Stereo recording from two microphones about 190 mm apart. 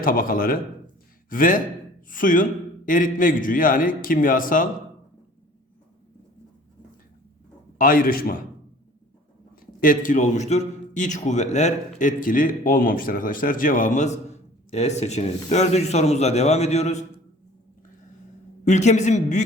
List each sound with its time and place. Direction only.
0.0 s a man's voice: 50° left (ahead or behind)
7.8 s a man's voice: 50° left (ahead or behind)
9.8 s a man's voice: 45° left (ahead or behind)
18.6 s a man's voice: 40° left (ahead or behind)